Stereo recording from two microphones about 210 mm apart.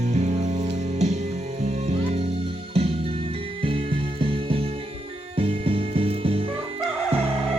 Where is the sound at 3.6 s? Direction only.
25° right (ahead or behind).